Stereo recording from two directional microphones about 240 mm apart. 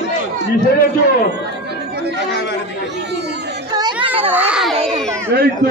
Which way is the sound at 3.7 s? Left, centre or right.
Centre.